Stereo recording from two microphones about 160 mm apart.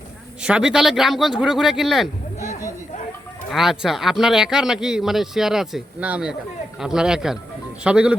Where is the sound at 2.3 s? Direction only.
50° left (ahead or behind).